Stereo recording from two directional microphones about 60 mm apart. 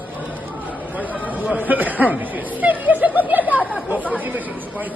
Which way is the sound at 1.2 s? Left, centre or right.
Right.